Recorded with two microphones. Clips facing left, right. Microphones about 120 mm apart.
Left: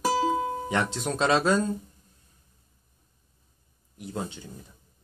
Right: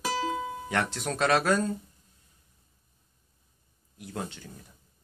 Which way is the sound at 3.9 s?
20° left (ahead or behind).